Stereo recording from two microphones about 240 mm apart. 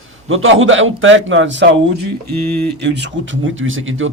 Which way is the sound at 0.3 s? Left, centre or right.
Right.